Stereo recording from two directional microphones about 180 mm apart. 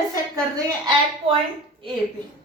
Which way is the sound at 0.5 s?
25° right (ahead or behind).